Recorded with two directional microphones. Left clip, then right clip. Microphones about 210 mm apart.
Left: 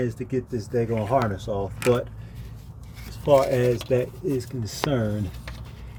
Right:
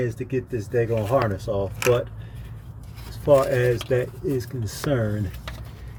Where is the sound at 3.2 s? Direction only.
15° left (ahead or behind).